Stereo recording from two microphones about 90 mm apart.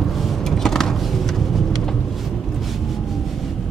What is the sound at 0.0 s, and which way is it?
Vehicle, centre (ahead or behind).